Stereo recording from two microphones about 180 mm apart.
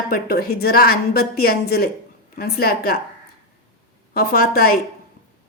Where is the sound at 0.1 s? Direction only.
60° left (ahead or behind).